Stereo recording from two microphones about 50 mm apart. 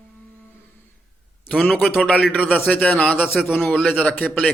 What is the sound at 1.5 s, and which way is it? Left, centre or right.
A man's voice, left.